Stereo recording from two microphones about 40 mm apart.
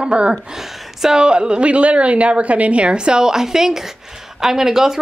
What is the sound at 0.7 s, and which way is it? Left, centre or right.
A woman's voice, centre.